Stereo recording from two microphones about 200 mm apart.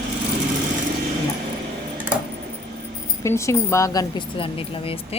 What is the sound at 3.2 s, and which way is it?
Speech, 15° left (ahead or behind).